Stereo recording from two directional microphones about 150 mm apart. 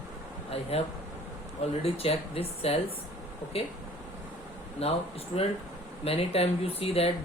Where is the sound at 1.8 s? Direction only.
40° left (ahead or behind).